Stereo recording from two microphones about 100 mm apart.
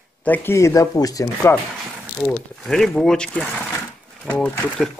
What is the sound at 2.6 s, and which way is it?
Speech, 5° left (ahead or behind).